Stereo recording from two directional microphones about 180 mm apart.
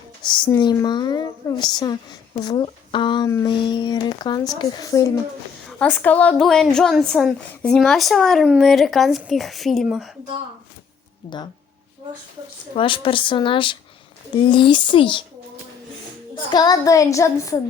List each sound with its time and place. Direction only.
0.3 s a child's voice: 25° left (ahead or behind)
5.6 s a woman's voice: 5° left (ahead or behind)
12.7 s a child's voice: 30° left (ahead or behind)
16.5 s a child's voice: 20° left (ahead or behind)